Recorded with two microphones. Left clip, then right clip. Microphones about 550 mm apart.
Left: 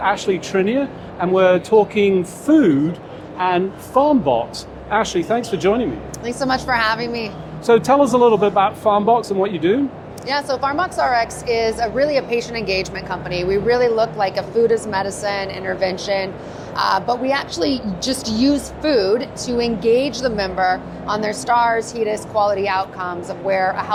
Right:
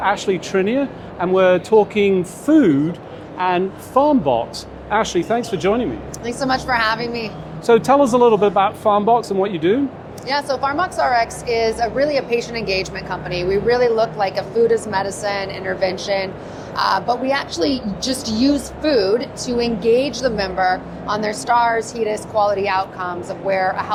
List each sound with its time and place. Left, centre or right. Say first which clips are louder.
0.0 s speech: even; right
1.3 s speech: even; right
4.9 s speech: even; right
6.2 s a woman's voice: even; left
7.7 s speech: even; right
10.2 s a woman's voice: even; left